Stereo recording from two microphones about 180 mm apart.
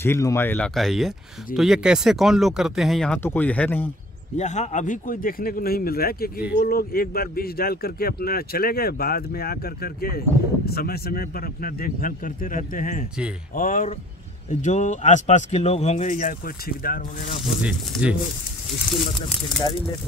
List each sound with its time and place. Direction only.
0.0 s speech: 15° left (ahead or behind)
0.7 s speech: centre (ahead or behind)
3.2 s speech: 10° left (ahead or behind)
4.4 s speech: 40° left (ahead or behind)
17.5 s speech: 5° right (ahead or behind)